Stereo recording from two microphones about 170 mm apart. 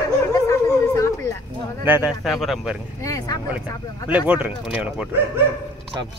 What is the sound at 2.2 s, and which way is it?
Speech, centre (ahead or behind).